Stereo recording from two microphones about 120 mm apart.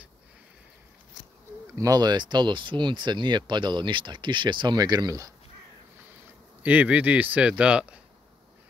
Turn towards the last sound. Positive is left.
turn(degrees=-10)  # may be behind; listen again after turning